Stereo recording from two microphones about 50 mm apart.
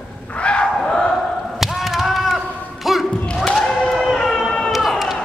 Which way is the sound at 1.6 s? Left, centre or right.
Centre.